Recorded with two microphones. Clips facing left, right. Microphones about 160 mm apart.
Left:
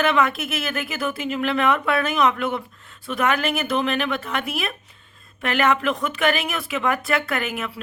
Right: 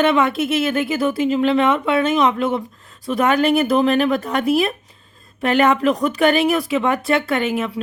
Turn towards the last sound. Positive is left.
turn(degrees=-30)  # may be behind; listen again after turning